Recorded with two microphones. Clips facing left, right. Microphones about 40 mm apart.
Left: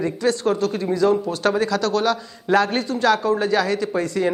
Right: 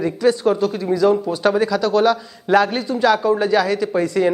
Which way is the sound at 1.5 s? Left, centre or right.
Centre.